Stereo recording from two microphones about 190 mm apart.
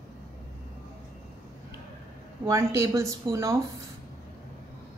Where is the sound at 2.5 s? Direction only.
15° right (ahead or behind).